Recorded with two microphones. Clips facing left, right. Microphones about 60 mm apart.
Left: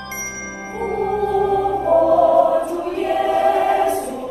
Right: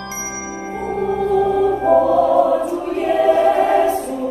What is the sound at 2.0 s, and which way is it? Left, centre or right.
Choir, left.